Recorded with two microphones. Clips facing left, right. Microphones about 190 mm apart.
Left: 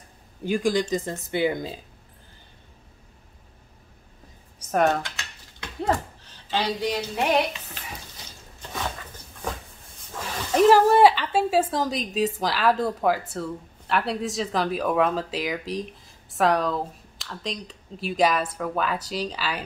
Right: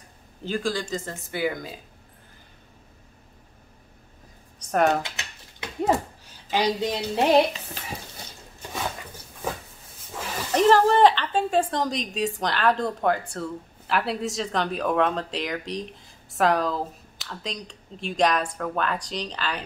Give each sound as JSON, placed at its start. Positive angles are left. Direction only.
{"t": 0.4, "sound": "speech", "side_deg": 15}
{"t": 4.6, "sound": "a sound", "side_deg": 0}
{"t": 5.0, "sound": "typewriter", "side_deg": -20}
{"t": 5.9, "sound": "speech", "side_deg": -10}
{"t": 10.5, "sound": "a woman's voice", "side_deg": 10}